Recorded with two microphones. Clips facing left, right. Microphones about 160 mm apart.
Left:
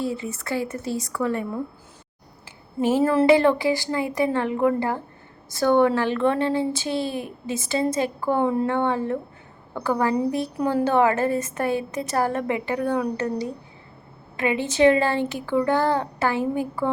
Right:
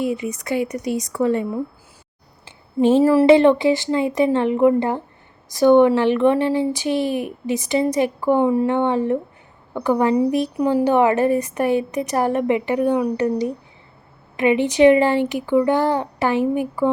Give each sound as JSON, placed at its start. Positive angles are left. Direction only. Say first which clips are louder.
{"t": 0.0, "sound": "a woman's voice", "louder": "right 5 dB", "side_deg": -15}